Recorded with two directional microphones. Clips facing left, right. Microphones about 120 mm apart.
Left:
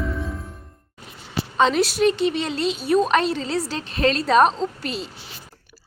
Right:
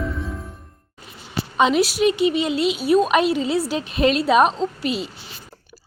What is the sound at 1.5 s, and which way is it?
A woman's voice, 10° right (ahead or behind).